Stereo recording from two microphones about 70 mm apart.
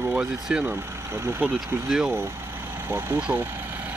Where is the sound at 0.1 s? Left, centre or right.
Centre.